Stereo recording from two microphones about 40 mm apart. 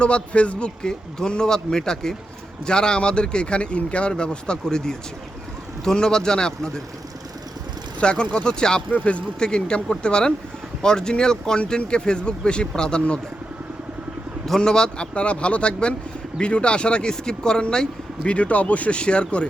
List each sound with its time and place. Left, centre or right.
0.0 s speech: left
0.8 s speech: centre
8.0 s speech: left
8.9 s speech: left
9.4 s speech: left
14.6 s speech: centre
15.1 s speech: left
18.3 s speech: left